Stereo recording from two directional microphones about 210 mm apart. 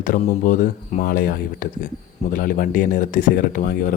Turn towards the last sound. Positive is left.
turn(degrees=40)  # may be behind; listen again after turning